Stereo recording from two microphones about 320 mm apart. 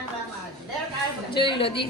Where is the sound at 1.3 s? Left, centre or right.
Centre.